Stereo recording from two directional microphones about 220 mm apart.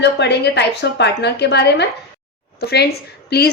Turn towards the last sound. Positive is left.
turn(degrees=45)  # may be behind; listen again after turning